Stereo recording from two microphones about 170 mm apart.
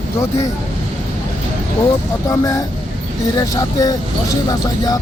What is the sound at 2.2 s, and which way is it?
Speech, 20° left (ahead or behind).